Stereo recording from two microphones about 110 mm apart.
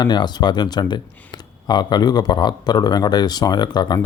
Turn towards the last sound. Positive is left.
turn(degrees=40)  # may be behind; listen again after turning